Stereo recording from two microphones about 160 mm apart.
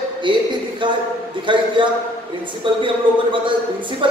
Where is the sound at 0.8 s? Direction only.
30° right (ahead or behind).